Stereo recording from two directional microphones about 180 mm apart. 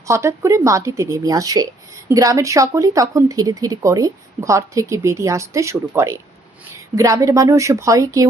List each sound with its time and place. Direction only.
0.0 s speech: 15° right (ahead or behind)